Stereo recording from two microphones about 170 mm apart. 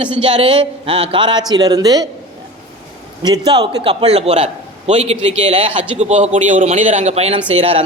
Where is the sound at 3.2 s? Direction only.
25° right (ahead or behind).